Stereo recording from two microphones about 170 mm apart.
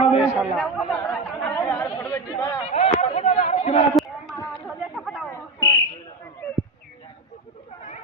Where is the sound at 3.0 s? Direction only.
35° left (ahead or behind).